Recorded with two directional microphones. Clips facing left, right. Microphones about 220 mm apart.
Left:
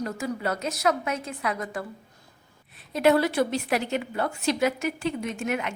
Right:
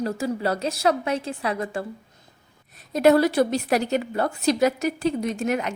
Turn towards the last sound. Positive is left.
turn(degrees=-40)  # may be behind; listen again after turning